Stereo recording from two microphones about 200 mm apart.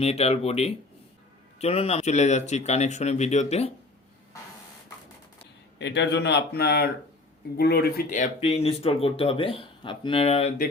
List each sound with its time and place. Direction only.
0.0 s speech: 30° left (ahead or behind)
5.8 s speech: 60° left (ahead or behind)
8.1 s speech: 35° left (ahead or behind)